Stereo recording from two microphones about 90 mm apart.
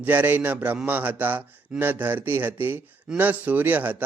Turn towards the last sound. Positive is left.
turn(degrees=-20)  # may be behind; listen again after turning